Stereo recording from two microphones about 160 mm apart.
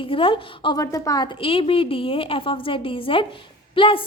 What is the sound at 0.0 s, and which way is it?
Speech, 35° left (ahead or behind).